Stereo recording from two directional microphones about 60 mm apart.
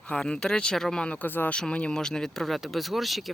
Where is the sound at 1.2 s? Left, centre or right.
Left.